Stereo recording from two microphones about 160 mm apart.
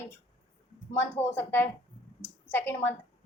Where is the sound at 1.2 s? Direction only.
15° left (ahead or behind).